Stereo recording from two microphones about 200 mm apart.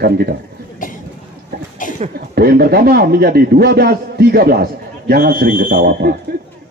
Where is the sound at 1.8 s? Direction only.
40° left (ahead or behind).